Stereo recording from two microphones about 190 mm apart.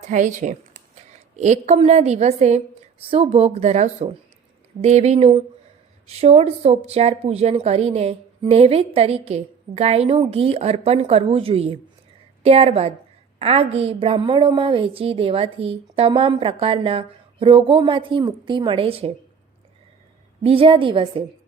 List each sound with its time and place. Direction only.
0.0 s a woman's voice: 40° right (ahead or behind)
20.4 s a woman's voice: 30° right (ahead or behind)